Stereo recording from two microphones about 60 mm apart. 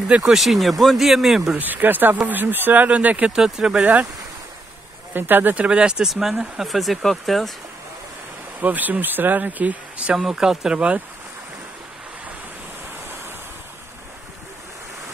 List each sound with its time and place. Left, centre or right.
0.2 s speech: centre
1.6 s speech: right
3.3 s speech: centre
3.8 s speech: right
5.1 s speech: right
5.7 s speech: centre
8.5 s speech: right
10.1 s speech: centre